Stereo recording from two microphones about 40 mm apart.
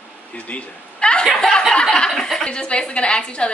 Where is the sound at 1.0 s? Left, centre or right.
Left.